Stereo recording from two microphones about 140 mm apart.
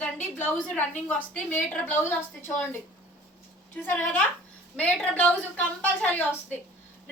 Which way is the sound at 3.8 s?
15° left (ahead or behind).